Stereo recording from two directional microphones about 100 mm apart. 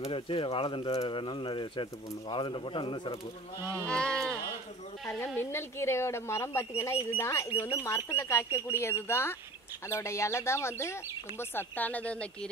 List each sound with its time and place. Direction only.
0.0 s speech: 65° left (ahead or behind)
3.7 s speech: 10° left (ahead or behind)
5.0 s speech: 25° left (ahead or behind)